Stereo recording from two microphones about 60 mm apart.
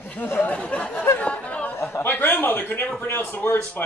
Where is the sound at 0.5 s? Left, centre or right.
Left.